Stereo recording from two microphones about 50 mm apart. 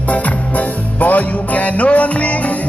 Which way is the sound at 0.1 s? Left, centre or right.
Left.